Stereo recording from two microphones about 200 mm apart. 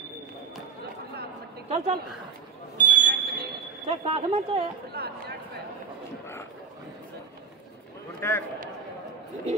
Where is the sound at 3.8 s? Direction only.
30° right (ahead or behind).